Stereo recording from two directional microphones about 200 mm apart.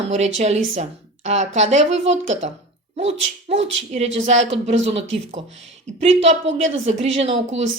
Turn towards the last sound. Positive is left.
turn(degrees=-30)  # may be behind; listen again after turning